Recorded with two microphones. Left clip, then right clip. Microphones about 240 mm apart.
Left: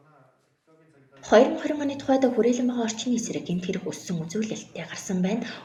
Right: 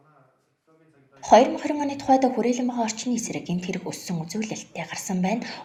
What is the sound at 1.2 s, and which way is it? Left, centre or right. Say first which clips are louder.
Speech: right 2 dB; right.